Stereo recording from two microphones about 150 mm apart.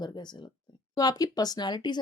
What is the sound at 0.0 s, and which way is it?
Speech, 30° left (ahead or behind).